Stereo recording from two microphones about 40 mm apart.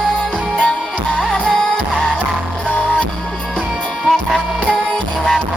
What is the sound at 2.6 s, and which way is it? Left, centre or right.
Music, left.